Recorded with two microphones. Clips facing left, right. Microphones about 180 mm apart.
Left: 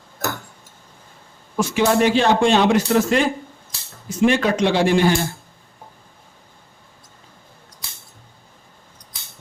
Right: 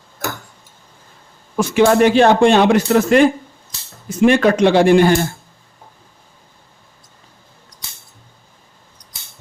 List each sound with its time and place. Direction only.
1.5 s speech: 55° right (ahead or behind)
4.3 s speech: 55° right (ahead or behind)